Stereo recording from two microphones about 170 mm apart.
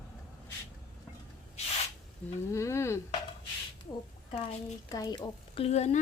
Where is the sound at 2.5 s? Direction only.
15° left (ahead or behind).